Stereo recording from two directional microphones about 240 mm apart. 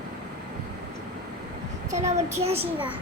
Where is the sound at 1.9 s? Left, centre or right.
Right.